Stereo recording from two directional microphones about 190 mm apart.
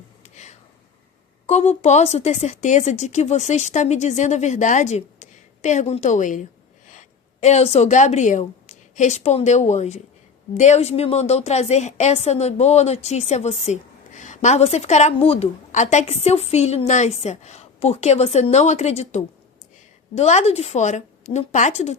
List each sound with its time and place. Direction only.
0.2 s a sound: 35° left (ahead or behind)
1.5 s a woman's voice: 35° left (ahead or behind)
7.4 s a woman's voice: 35° left (ahead or behind)